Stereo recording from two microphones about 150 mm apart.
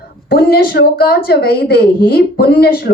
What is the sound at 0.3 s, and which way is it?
A woman's voice, 90° left.